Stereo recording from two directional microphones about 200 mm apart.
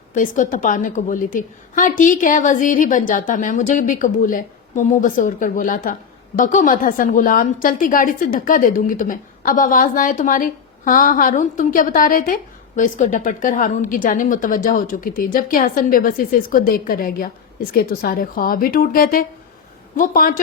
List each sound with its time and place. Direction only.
0.1 s a woman's voice: 40° left (ahead or behind)